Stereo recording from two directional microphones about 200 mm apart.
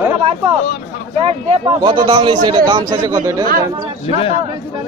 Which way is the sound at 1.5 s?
25° right (ahead or behind).